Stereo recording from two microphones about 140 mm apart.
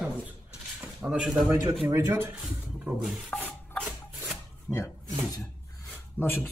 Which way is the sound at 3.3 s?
10° left (ahead or behind).